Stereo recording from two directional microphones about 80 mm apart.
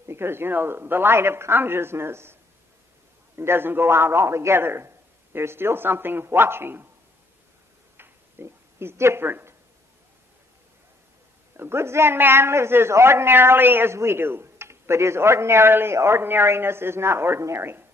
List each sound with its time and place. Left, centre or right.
0.0 s a man's voice: right
3.3 s a man's voice: right
8.0 s a sound: right
11.5 s a man's voice: right